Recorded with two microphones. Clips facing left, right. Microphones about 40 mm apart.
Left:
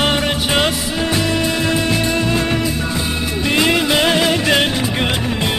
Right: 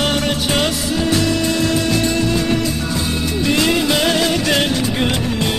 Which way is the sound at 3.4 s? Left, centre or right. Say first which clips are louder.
Left 1 dB; left.